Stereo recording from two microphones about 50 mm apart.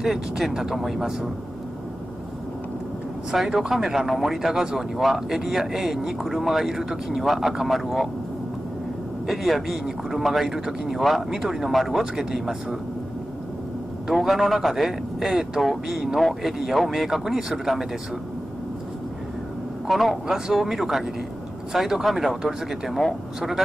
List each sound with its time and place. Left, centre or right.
0.0 s speech: centre
3.5 s speech: centre
9.3 s speech: centre
14.1 s speech: centre
19.9 s speech: centre